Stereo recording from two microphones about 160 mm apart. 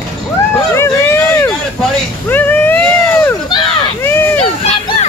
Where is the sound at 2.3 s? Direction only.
10° left (ahead or behind).